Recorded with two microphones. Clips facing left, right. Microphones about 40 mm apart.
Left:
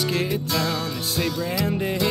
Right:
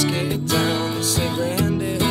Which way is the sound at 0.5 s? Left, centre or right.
Right.